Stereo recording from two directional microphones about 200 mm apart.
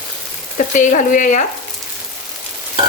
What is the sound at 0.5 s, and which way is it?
Stir, 40° left (ahead or behind).